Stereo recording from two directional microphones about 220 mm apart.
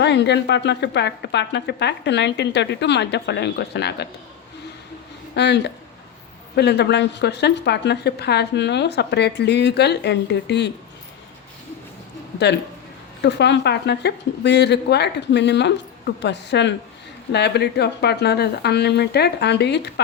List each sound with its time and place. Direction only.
0.0 s a woman's voice: 50° left (ahead or behind)
5.3 s a woman's voice: 50° left (ahead or behind)
13.2 s a woman's voice: 50° left (ahead or behind)